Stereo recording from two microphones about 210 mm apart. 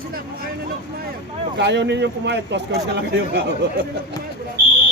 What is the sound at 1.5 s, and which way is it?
Speech, 55° right (ahead or behind).